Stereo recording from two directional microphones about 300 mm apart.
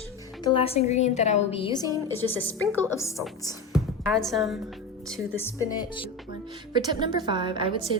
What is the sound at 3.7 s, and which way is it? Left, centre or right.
A woman's voice, centre.